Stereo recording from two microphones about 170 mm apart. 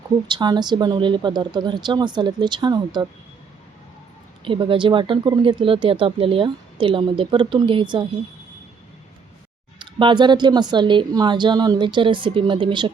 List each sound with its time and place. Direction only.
0.3 s speech: 25° right (ahead or behind)
4.4 s speech: 30° right (ahead or behind)
9.7 s speech: 30° right (ahead or behind)